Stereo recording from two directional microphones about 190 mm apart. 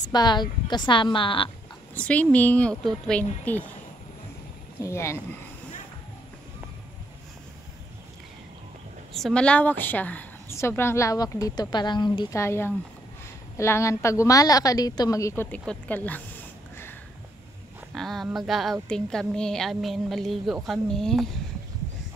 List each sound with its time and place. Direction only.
0.1 s a woman's voice: 20° left (ahead or behind)
2.0 s a woman's voice: 5° left (ahead or behind)
4.7 s a woman's voice: 15° left (ahead or behind)
9.1 s a woman's voice: 5° left (ahead or behind)
17.9 s a woman's voice: centre (ahead or behind)